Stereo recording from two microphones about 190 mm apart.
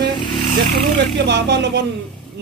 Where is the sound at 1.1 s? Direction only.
65° right (ahead or behind).